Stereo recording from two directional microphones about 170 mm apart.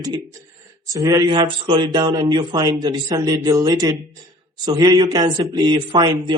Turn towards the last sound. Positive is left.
turn(degrees=-30)  # may be behind; listen again after turning